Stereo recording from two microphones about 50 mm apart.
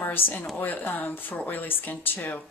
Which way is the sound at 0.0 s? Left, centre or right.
Left.